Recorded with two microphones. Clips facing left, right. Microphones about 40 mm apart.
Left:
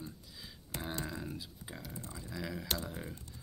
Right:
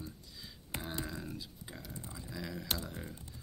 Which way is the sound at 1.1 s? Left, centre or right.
Centre.